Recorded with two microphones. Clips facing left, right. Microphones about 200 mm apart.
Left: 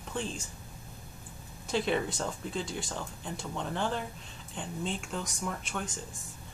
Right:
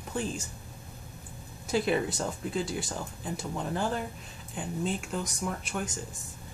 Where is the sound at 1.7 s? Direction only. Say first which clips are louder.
Right 2 dB; 5° right (ahead or behind).